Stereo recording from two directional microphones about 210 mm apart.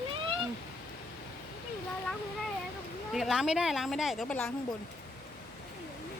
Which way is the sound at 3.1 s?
Centre (ahead or behind).